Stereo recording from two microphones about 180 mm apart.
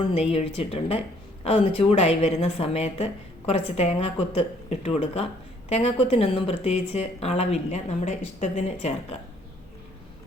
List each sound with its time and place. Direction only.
0.0 s speech: 35° left (ahead or behind)